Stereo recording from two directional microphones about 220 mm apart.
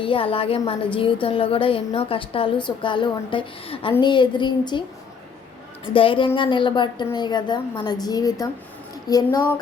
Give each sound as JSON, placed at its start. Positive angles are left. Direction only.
{"t": 0.0, "sound": "a woman's voice", "side_deg": 25}
{"t": 5.9, "sound": "a woman's voice", "side_deg": 25}